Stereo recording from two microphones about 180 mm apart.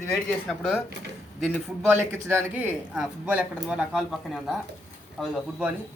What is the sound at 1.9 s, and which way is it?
A man's voice, 10° right (ahead or behind).